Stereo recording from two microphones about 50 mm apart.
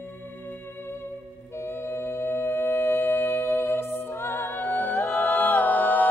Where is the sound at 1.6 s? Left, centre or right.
Left.